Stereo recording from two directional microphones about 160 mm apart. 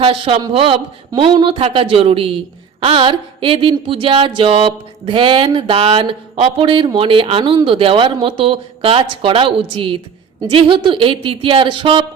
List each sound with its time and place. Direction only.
0.0 s speech: 35° right (ahead or behind)